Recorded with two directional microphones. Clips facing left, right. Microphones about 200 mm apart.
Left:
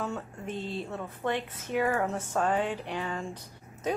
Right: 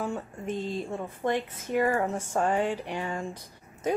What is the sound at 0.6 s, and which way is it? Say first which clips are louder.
Speech: right 2 dB; 45° right (ahead or behind).